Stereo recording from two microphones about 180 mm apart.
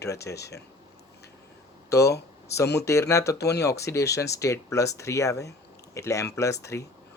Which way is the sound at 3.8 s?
15° left (ahead or behind).